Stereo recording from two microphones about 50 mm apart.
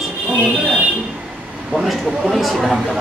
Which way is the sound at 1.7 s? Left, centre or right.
Centre.